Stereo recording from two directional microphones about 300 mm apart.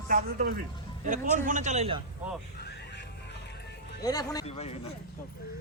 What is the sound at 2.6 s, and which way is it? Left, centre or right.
Music, left.